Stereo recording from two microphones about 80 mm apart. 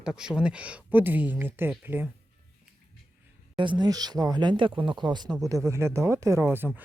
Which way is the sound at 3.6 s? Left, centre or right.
Right.